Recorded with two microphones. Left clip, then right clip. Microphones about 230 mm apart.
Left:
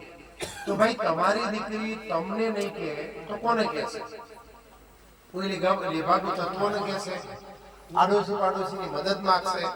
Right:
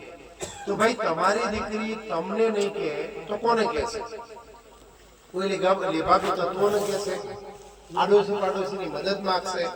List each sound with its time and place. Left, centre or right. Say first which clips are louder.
0.3 s a man's voice: left 1 dB; centre
5.4 s a man's voice: right 3 dB; left